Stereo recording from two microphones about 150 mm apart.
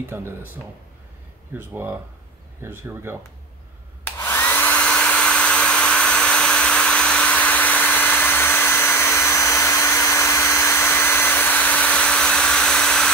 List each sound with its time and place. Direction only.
0.1 s speech: 15° right (ahead or behind)
1.7 s speech: 10° right (ahead or behind)
4.2 s hair dryer: 15° left (ahead or behind)